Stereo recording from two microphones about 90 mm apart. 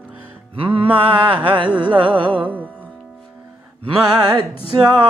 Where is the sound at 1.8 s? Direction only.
65° right (ahead or behind).